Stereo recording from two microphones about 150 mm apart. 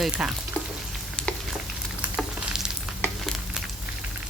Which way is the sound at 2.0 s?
5° right (ahead or behind).